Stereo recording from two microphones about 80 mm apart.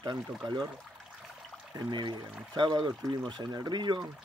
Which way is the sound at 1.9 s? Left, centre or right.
Right.